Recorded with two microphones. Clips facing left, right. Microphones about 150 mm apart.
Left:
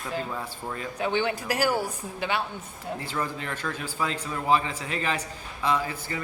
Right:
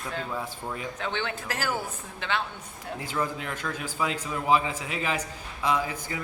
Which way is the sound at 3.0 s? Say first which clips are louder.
Right 3 dB; 10° right (ahead or behind).